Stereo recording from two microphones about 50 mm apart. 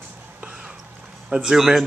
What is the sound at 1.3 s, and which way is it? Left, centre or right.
Speech, centre.